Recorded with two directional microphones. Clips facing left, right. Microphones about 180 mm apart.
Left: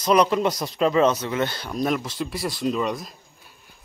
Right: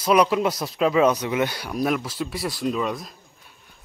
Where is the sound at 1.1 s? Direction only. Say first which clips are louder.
Right 1 dB; 15° right (ahead or behind).